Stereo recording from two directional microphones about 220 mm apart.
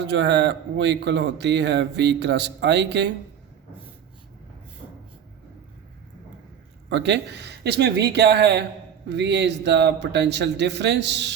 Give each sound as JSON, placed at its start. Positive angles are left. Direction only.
{"t": 0.0, "sound": "speech", "side_deg": -50}
{"t": 6.9, "sound": "speech", "side_deg": -50}